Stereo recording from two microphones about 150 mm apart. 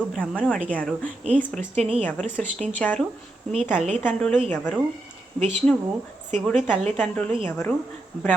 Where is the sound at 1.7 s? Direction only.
40° right (ahead or behind).